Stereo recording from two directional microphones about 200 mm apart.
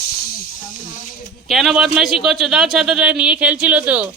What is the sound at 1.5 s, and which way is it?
Speech, centre (ahead or behind).